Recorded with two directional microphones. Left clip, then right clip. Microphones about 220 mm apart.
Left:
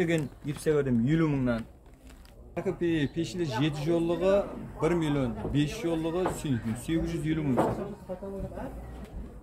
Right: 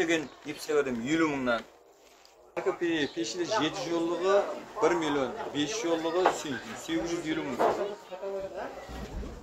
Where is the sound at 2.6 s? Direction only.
45° left (ahead or behind).